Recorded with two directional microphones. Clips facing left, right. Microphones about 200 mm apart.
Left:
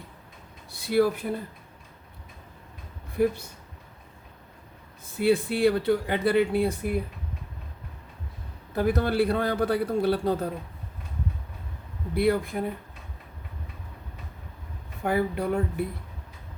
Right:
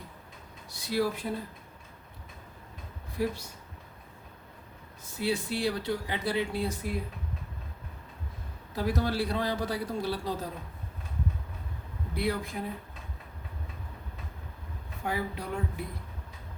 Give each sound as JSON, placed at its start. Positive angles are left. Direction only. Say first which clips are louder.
{"t": 0.7, "sound": "speech", "louder": "left 7 dB", "side_deg": 55}
{"t": 5.1, "sound": "a man's voice", "louder": "left 7 dB", "side_deg": 55}
{"t": 8.7, "sound": "a man's voice", "louder": "left 5 dB", "side_deg": 60}
{"t": 12.1, "sound": "a man's voice", "louder": "left 8 dB", "side_deg": 55}
{"t": 15.0, "sound": "a man's voice", "louder": "left 8 dB", "side_deg": 55}